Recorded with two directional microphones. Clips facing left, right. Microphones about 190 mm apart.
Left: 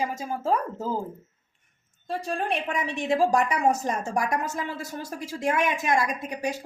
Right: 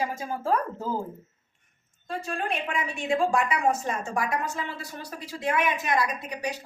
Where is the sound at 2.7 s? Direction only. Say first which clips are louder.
Left 2 dB; 40° left (ahead or behind).